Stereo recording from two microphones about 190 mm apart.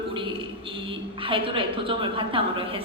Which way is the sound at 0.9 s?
25° right (ahead or behind).